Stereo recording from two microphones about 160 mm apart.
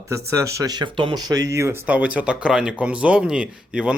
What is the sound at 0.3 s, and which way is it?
Speech, 20° right (ahead or behind).